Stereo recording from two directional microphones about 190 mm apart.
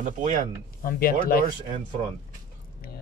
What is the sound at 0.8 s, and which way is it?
Speech, 50° left (ahead or behind).